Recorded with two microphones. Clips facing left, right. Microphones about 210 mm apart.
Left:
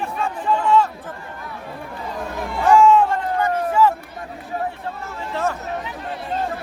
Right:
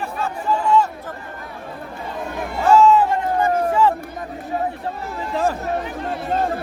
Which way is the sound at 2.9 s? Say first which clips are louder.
Even; 5° right (ahead or behind).